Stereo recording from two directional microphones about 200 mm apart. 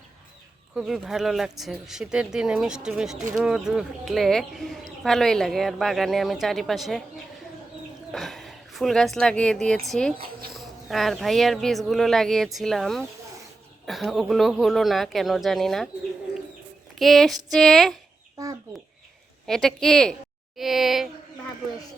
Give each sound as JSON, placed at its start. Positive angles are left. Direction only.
{"t": 0.8, "sound": "speech", "side_deg": 0}
{"t": 8.1, "sound": "a woman's voice", "side_deg": 0}
{"t": 16.9, "sound": "speech", "side_deg": 0}
{"t": 18.4, "sound": "chicken", "side_deg": -15}
{"t": 19.5, "sound": "speech", "side_deg": 0}